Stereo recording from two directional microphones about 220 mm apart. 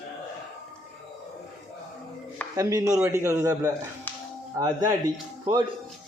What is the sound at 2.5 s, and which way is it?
A man's voice, 15° right (ahead or behind).